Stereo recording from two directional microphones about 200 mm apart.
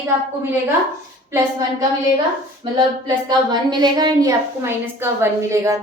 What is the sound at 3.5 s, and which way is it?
A woman's voice, 20° right (ahead or behind).